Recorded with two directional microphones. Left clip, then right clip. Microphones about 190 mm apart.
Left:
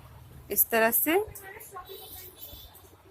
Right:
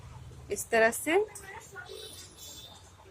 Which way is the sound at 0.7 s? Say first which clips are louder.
Even; 15° left (ahead or behind).